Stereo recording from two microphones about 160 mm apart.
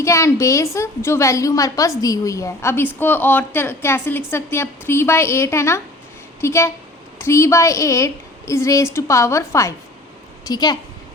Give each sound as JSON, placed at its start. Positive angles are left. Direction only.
{"t": 0.0, "sound": "a woman's voice", "side_deg": 20}